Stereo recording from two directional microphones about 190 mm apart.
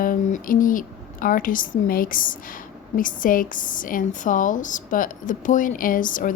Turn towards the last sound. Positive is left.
turn(degrees=45)  # may be behind; listen again after turning